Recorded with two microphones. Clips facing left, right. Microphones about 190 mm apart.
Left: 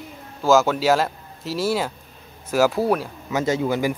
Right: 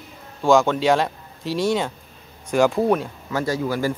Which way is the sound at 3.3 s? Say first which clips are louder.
Left 2 dB; 20° left (ahead or behind).